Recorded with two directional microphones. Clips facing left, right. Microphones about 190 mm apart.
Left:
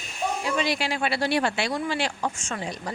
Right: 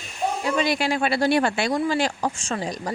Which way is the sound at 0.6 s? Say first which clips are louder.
Right 5 dB; 50° right (ahead or behind).